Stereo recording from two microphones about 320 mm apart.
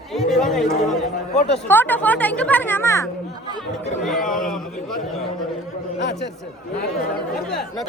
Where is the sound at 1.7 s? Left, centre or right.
Centre.